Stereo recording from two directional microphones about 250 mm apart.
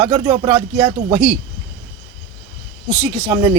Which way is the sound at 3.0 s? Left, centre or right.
Centre.